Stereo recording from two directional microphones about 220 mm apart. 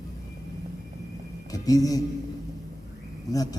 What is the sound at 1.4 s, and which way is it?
Speech, 15° left (ahead or behind).